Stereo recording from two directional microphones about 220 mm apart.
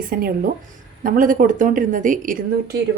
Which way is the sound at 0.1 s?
40° right (ahead or behind).